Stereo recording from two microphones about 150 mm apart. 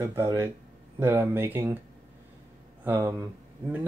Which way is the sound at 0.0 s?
15° right (ahead or behind).